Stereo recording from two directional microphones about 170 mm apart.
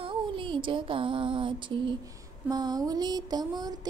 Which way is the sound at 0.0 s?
30° right (ahead or behind).